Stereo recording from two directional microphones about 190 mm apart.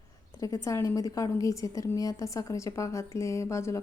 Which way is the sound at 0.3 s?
15° left (ahead or behind).